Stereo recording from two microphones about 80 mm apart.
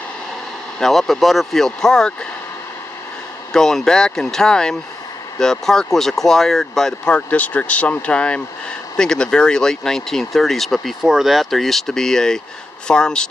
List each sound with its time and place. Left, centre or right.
0.7 s speech: centre
3.5 s speech: centre
7.2 s speech: centre